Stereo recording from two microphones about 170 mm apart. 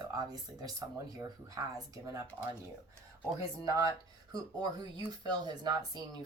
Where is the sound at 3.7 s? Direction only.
20° right (ahead or behind).